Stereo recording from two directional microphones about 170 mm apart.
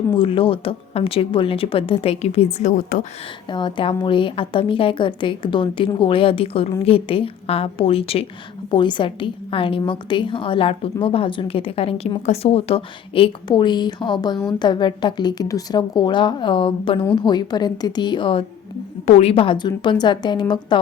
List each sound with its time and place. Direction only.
0.2 s a woman's voice: 30° left (ahead or behind); by 3.1 s 50° left (ahead or behind)
3.5 s a woman's voice: 30° left (ahead or behind)